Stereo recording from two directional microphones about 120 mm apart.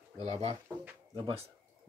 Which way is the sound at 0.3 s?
60° right (ahead or behind).